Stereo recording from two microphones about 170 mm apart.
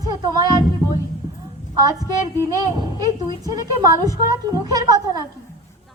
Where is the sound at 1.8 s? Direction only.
20° right (ahead or behind).